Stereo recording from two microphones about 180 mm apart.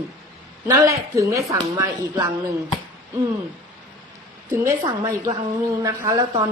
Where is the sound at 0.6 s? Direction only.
15° right (ahead or behind).